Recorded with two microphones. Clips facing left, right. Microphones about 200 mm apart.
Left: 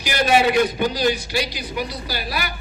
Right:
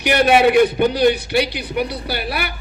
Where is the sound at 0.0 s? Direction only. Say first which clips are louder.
Right 5 dB; 60° right (ahead or behind).